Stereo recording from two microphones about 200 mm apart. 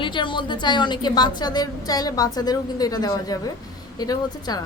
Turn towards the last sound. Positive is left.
turn(degrees=20)  # may be behind; listen again after turning